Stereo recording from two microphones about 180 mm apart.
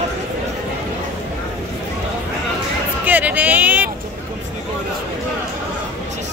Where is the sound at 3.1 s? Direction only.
10° right (ahead or behind).